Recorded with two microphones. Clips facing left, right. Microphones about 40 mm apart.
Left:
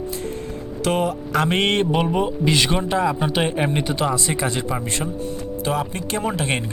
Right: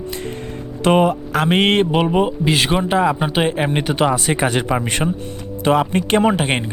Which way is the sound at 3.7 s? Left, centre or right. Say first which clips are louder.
Right 4 dB; right.